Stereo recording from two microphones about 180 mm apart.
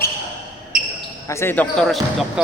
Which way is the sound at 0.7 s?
50° right (ahead or behind).